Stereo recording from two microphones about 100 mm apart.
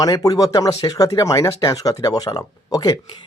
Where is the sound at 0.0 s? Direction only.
40° left (ahead or behind).